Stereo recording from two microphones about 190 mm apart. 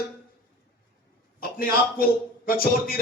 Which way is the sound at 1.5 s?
50° left (ahead or behind).